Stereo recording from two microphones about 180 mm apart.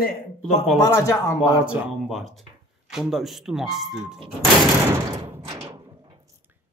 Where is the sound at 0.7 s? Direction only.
20° left (ahead or behind).